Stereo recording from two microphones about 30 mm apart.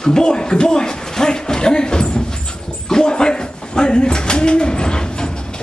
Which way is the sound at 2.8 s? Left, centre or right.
Left.